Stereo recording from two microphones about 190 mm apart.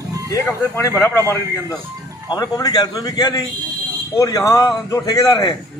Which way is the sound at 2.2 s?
20° left (ahead or behind).